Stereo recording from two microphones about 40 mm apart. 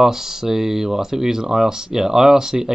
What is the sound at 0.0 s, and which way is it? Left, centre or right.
Speech, centre.